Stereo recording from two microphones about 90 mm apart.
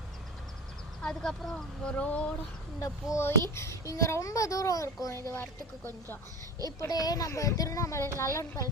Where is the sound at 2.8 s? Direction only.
35° left (ahead or behind).